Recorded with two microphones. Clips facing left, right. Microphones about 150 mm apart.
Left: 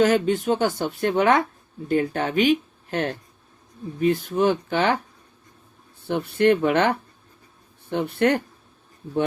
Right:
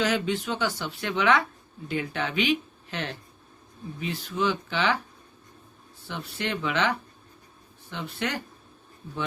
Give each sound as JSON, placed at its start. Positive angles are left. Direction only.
{"t": 0.0, "sound": "speech", "side_deg": 50}
{"t": 6.1, "sound": "speech", "side_deg": 55}